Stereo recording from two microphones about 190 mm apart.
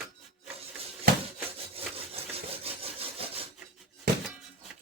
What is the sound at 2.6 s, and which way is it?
Rub, 30° right (ahead or behind).